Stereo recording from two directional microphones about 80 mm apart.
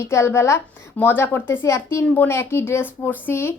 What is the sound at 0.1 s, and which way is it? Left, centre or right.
A woman's voice, left.